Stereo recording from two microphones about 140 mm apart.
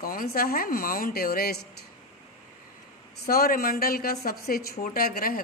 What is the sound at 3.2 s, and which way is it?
A woman's voice, 90° left.